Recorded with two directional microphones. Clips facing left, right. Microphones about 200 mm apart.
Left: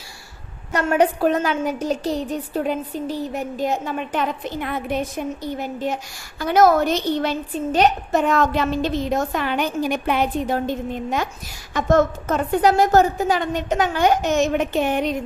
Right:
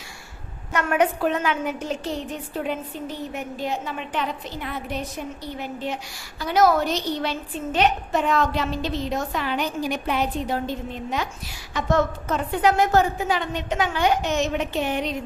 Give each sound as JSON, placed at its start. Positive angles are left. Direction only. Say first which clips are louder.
{"t": 0.7, "sound": "a woman's voice", "louder": "left 3 dB", "side_deg": 35}